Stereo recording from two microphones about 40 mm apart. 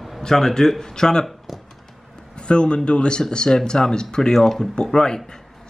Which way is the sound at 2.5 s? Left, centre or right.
Left.